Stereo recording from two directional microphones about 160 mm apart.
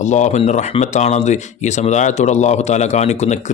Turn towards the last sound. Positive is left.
turn(degrees=45)  # may be behind; listen again after turning